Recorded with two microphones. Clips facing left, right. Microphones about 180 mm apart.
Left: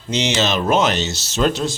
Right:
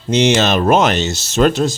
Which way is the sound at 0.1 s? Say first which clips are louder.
Right 6 dB; 50° right (ahead or behind).